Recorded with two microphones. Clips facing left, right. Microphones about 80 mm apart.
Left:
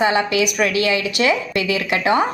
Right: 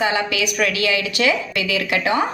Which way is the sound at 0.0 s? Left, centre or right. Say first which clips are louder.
Left 3 dB; left.